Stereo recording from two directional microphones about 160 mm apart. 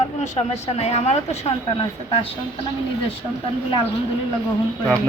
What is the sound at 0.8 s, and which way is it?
Speech, 40° left (ahead or behind).